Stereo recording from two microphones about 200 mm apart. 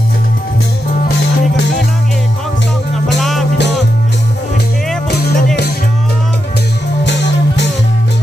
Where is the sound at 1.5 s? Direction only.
55° left (ahead or behind).